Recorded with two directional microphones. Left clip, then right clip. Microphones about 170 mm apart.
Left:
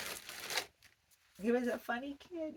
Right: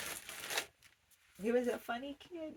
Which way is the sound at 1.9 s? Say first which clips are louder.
Left 2 dB; 15° left (ahead or behind).